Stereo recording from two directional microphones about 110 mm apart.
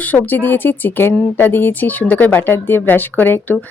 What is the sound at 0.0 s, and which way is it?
Speech, 15° left (ahead or behind).